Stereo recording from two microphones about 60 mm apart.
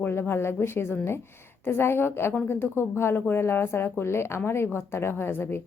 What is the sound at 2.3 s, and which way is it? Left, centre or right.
A woman's voice, left.